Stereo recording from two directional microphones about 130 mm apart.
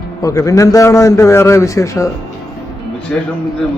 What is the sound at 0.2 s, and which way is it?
A man's voice, 25° left (ahead or behind).